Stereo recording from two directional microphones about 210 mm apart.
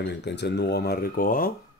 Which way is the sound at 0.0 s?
55° left (ahead or behind).